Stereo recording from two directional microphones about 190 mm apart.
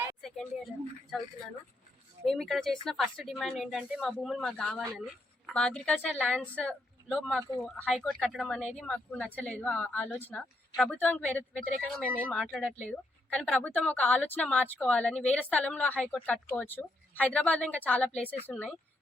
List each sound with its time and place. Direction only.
0.2 s speech: centre (ahead or behind)